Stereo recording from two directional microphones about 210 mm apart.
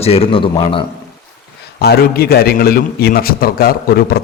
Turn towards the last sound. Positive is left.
turn(degrees=45)  # may be behind; listen again after turning